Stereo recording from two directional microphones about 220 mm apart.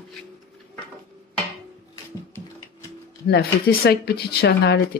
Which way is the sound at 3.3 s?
45° left (ahead or behind).